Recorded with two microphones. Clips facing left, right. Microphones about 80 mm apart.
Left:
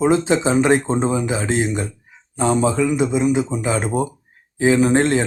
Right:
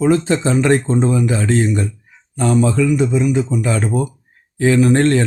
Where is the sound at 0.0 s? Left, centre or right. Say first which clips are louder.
Right 1 dB; left.